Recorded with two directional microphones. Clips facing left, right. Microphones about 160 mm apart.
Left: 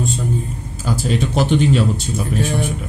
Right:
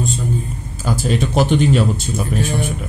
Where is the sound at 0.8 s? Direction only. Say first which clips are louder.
Right 1 dB; 55° right (ahead or behind).